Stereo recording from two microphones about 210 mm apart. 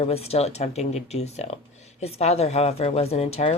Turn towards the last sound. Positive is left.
turn(degrees=30)  # may be behind; listen again after turning